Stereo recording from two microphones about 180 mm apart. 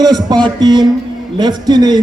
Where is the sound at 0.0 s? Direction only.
20° right (ahead or behind).